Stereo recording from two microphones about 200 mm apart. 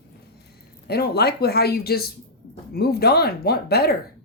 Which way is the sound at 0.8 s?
50° left (ahead or behind).